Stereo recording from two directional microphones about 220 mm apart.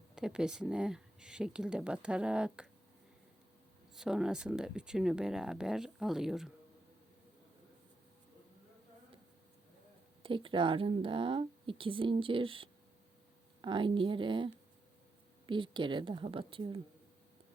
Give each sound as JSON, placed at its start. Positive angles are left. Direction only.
{"t": 0.2, "sound": "speech", "side_deg": -5}
{"t": 3.9, "sound": "speech", "side_deg": -5}
{"t": 10.2, "sound": "speech", "side_deg": -25}